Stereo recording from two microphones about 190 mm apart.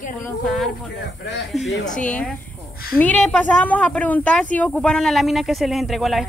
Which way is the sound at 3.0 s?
5° left (ahead or behind).